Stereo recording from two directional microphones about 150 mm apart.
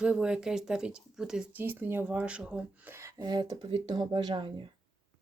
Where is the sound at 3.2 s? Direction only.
25° right (ahead or behind).